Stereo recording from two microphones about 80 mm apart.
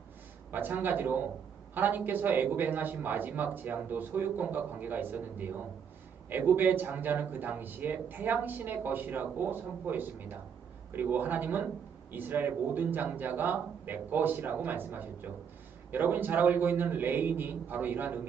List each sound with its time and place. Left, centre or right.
0.5 s speech: right